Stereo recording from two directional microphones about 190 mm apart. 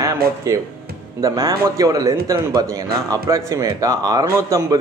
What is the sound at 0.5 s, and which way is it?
A man's voice, 15° right (ahead or behind).